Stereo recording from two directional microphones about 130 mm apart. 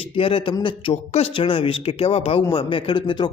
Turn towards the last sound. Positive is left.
turn(degrees=40)  # may be behind; listen again after turning